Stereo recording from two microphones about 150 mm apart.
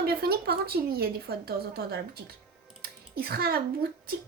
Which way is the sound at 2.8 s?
90° right.